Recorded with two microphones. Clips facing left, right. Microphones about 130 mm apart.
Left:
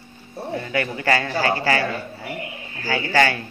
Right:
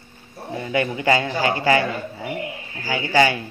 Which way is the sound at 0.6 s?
20° right (ahead or behind).